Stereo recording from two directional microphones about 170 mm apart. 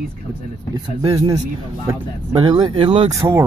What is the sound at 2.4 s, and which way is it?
Speech, 30° right (ahead or behind).